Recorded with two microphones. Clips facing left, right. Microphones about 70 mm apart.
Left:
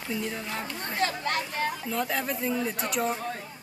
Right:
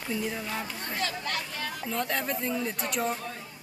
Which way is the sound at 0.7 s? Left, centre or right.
Left.